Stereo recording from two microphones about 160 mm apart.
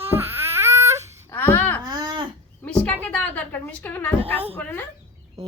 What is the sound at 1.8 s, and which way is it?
Babbling, 25° right (ahead or behind).